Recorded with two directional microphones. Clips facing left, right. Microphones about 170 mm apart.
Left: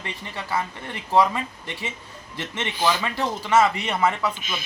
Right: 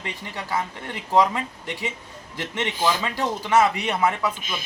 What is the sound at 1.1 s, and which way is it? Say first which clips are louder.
A man's voice: even; 15° right (ahead or behind).